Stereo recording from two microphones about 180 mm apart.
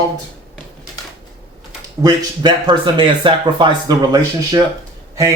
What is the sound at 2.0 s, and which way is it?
Speech, 20° right (ahead or behind).